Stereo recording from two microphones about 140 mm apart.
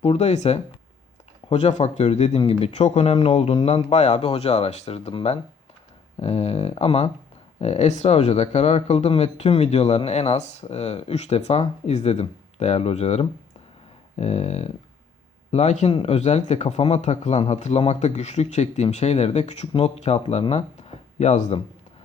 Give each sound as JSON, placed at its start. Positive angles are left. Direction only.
{"t": 0.0, "sound": "speech", "side_deg": 50}